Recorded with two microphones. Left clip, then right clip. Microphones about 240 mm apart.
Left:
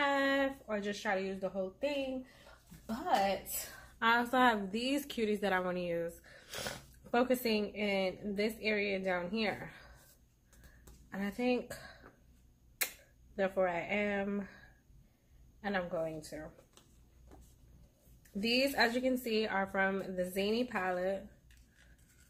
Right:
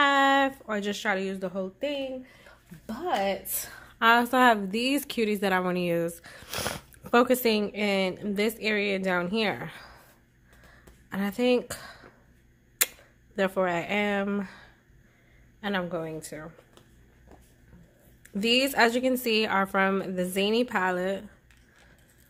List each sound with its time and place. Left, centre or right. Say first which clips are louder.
0.0 s speech: right 10 dB; right
3.3 s a woman's voice: right 6 dB; right
11.1 s speech: right 9 dB; right
13.4 s a woman's voice: right 6 dB; right
18.4 s a woman's voice: right 8 dB; right